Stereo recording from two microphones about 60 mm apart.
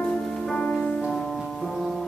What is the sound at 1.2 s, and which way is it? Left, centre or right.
Music, centre.